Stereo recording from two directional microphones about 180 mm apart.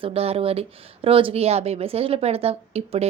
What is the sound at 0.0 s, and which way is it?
Speech, 35° right (ahead or behind).